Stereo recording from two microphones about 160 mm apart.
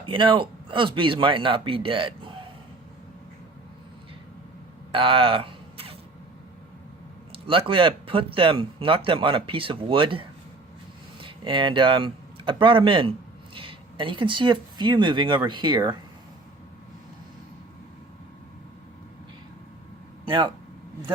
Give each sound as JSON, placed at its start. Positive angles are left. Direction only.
{"t": 0.0, "sound": "speech", "side_deg": -30}
{"t": 4.9, "sound": "a sound", "side_deg": -35}
{"t": 7.3, "sound": "speech", "side_deg": -35}
{"t": 20.2, "sound": "speech", "side_deg": -30}